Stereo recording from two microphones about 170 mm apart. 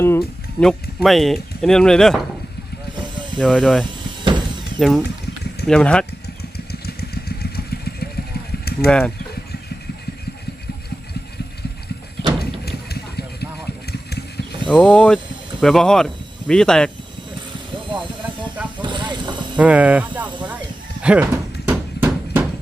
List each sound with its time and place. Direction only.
0.0 s speech: 15° left (ahead or behind)
0.7 s speech: centre (ahead or behind)
3.3 s speech: 5° left (ahead or behind)
4.2 s a sound: 25° right (ahead or behind)
4.8 s speech: centre (ahead or behind)
6.7 s vehicle: 65° left (ahead or behind)
8.9 s speech: 5° left (ahead or behind)
12.6 s vehicle: 70° left (ahead or behind)
14.7 s speech: 5° left (ahead or behind)
17.7 s a sound: 30° right (ahead or behind)
18.8 s vehicle: 25° right (ahead or behind)
19.5 s speech: 10° right (ahead or behind)
21.7 s hammer: 10° right (ahead or behind)